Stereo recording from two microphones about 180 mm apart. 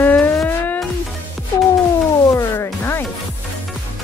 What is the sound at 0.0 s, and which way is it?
Music, 10° left (ahead or behind).